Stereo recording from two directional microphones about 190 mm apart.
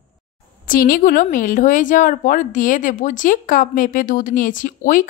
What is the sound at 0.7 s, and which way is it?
A woman's voice, 45° left (ahead or behind).